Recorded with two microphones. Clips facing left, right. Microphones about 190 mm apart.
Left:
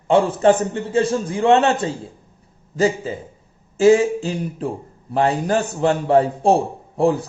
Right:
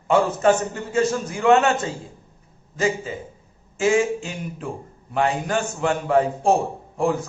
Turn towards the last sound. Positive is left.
turn(degrees=35)  # may be behind; listen again after turning